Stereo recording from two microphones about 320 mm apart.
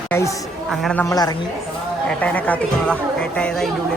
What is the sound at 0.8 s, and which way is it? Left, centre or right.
A woman's voice, centre.